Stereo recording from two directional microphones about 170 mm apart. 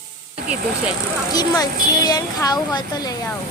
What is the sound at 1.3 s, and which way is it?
Speech, 20° left (ahead or behind).